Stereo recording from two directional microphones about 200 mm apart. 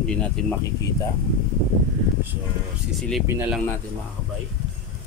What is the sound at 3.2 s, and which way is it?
Speech, 10° right (ahead or behind).